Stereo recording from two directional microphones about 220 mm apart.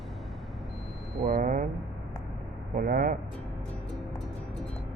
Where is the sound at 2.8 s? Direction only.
40° right (ahead or behind).